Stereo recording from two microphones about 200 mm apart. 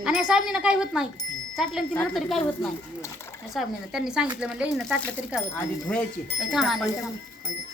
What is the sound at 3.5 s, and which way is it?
Speech, centre (ahead or behind).